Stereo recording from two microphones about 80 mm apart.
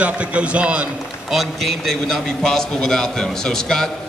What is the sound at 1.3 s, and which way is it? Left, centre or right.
A man's voice, centre.